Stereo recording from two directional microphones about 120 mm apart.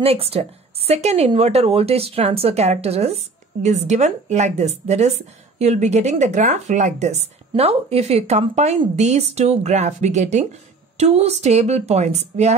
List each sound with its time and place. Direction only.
0.0 s a woman's voice: 55° right (ahead or behind)